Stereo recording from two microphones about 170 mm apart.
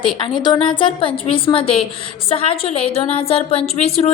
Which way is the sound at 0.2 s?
25° left (ahead or behind).